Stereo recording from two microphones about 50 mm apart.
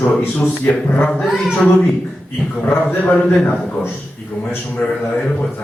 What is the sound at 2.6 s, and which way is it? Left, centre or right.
Speech, left.